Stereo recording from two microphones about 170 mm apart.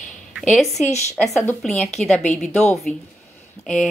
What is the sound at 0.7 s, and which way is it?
Speech, 40° left (ahead or behind).